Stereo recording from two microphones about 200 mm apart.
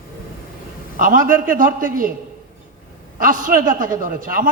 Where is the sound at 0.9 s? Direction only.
45° right (ahead or behind).